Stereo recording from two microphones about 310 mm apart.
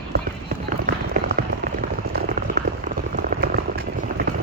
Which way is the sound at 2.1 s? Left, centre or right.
Right.